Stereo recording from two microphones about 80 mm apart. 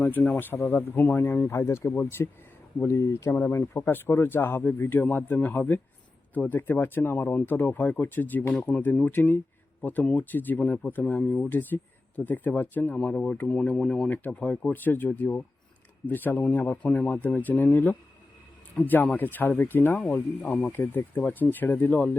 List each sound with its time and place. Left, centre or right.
0.0 s speech: centre